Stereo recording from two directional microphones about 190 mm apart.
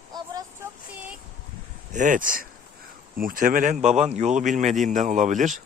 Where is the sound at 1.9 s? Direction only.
40° right (ahead or behind).